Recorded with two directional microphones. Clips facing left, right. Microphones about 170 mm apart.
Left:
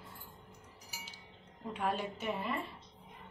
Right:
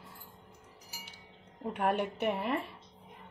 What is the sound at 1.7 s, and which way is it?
Speech, 60° right (ahead or behind).